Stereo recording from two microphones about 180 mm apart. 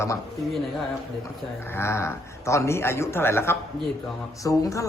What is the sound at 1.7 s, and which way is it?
Speech, 15° left (ahead or behind).